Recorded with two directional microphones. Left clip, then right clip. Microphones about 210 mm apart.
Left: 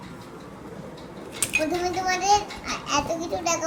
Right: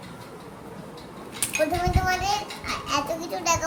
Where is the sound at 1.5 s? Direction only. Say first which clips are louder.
Right 1 dB; 15° right (ahead or behind).